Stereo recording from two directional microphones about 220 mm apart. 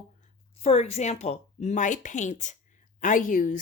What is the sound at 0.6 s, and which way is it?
Speech, 30° left (ahead or behind).